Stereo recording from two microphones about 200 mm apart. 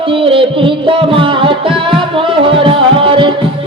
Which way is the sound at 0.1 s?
25° right (ahead or behind).